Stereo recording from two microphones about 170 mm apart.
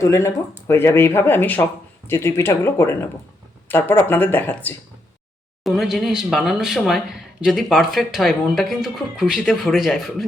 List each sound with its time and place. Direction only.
0.0 s speech: 15° left (ahead or behind)
5.6 s speech: centre (ahead or behind)